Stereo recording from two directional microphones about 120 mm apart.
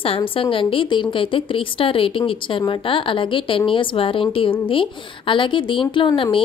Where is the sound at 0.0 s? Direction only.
50° left (ahead or behind).